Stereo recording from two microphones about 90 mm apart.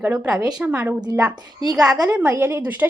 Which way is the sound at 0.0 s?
15° right (ahead or behind).